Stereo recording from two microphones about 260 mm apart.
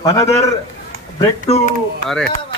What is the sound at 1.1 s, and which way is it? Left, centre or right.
Speech, left.